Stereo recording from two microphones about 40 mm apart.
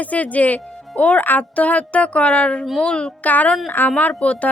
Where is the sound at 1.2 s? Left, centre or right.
Left.